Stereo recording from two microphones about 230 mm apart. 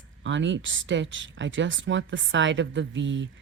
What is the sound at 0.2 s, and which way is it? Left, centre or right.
Speech, right.